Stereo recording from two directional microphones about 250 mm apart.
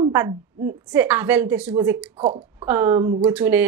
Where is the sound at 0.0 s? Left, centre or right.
Centre.